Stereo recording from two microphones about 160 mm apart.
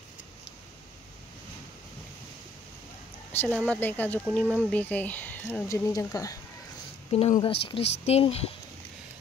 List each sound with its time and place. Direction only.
3.5 s speech: 10° left (ahead or behind)
7.1 s speech: 40° left (ahead or behind)